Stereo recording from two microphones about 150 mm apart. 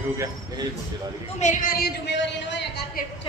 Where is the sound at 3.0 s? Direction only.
70° left (ahead or behind).